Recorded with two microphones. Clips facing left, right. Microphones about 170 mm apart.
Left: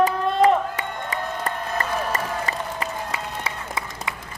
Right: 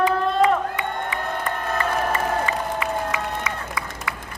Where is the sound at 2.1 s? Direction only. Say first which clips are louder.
Right 4 dB; 35° left (ahead or behind).